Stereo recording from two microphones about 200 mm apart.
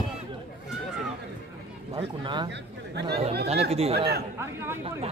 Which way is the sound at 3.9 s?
55° right (ahead or behind).